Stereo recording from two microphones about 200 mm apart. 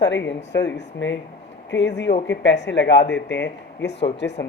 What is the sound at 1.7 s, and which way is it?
Speech, 60° left (ahead or behind).